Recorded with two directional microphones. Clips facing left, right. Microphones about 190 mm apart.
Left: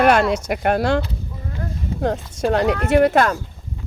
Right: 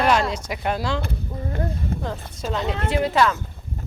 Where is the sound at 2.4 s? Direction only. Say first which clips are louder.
Left 8 dB; 70° left (ahead or behind).